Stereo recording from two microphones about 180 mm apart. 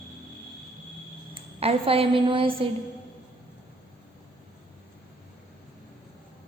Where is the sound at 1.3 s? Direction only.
30° right (ahead or behind).